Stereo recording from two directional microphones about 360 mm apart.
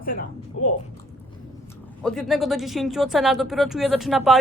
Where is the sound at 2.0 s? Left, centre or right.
Centre.